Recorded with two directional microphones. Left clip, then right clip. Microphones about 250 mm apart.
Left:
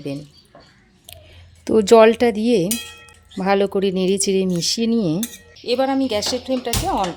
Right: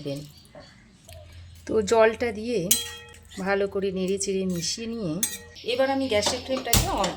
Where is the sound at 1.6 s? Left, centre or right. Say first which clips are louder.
Left 9 dB; left.